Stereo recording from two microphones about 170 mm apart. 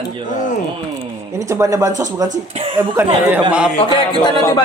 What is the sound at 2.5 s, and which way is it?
Speech, 35° right (ahead or behind).